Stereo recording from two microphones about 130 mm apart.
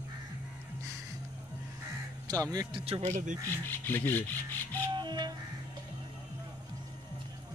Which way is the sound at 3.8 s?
15° left (ahead or behind).